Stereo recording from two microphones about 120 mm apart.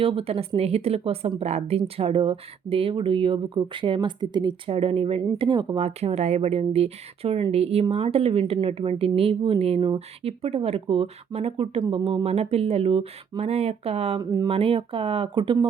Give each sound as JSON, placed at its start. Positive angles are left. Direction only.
{"t": 0.0, "sound": "speech", "side_deg": -50}
{"t": 4.7, "sound": "speech", "side_deg": -50}
{"t": 5.4, "sound": "speech", "side_deg": -40}
{"t": 5.8, "sound": "speech", "side_deg": -60}
{"t": 14.2, "sound": "speech", "side_deg": -30}
{"t": 14.5, "sound": "speech", "side_deg": -50}